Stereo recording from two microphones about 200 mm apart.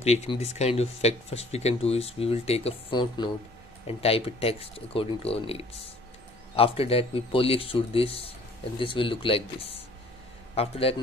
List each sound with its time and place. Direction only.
0.0 s a man's voice: 30° left (ahead or behind)